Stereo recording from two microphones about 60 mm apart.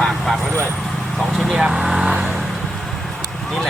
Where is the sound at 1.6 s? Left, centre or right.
Centre.